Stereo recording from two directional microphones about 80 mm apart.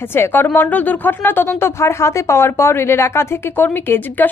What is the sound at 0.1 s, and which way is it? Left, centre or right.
A woman's voice, left.